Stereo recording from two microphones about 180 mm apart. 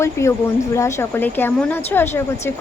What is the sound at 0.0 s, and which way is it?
A woman's voice, 15° left (ahead or behind).